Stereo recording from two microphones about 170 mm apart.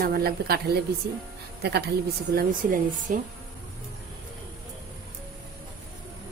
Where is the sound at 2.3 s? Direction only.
60° right (ahead or behind).